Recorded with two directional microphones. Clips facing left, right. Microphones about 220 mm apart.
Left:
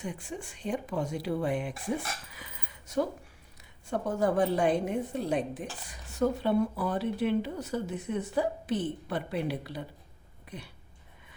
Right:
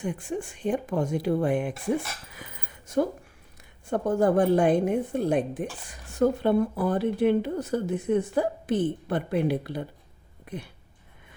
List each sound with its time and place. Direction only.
0.0 s a woman's voice: 50° right (ahead or behind)
2.3 s a sound: 50° right (ahead or behind)
3.8 s a woman's voice: 50° right (ahead or behind)